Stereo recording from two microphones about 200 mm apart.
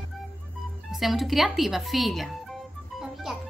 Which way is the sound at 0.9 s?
Centre (ahead or behind).